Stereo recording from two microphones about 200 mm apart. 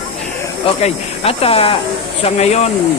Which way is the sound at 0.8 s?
30° left (ahead or behind).